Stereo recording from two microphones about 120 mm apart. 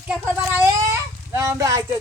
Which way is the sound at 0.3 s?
20° right (ahead or behind).